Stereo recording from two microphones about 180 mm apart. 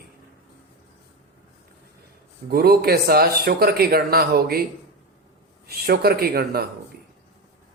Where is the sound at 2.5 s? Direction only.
60° right (ahead or behind).